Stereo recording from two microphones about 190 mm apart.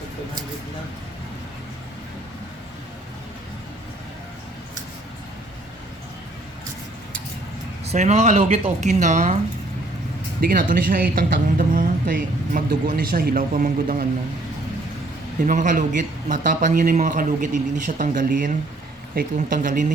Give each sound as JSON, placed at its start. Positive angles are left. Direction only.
{"t": 7.9, "sound": "speech", "side_deg": -35}
{"t": 10.4, "sound": "a woman's voice", "side_deg": -50}
{"t": 15.4, "sound": "a woman's voice", "side_deg": -45}